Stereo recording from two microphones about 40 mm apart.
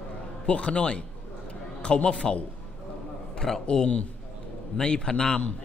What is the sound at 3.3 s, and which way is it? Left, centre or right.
Speech, centre.